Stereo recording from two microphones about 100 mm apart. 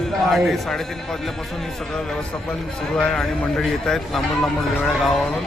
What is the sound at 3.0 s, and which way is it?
A man's voice, 5° left (ahead or behind).